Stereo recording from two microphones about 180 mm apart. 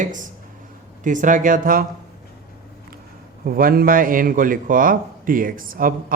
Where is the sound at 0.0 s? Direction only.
45° right (ahead or behind).